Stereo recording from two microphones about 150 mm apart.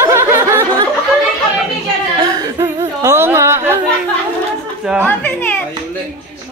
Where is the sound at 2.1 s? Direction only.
25° right (ahead or behind).